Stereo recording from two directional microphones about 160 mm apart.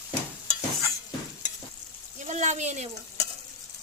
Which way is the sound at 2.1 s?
50° right (ahead or behind).